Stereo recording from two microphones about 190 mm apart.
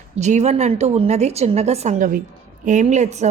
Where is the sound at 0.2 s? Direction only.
35° right (ahead or behind).